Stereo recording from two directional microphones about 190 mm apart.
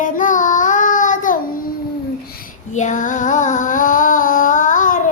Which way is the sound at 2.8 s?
40° left (ahead or behind).